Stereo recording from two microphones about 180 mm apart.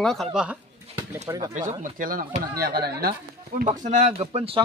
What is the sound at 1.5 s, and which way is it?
Speech, 45° right (ahead or behind).